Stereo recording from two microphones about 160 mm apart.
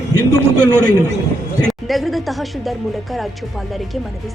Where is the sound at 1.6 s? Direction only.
Centre (ahead or behind).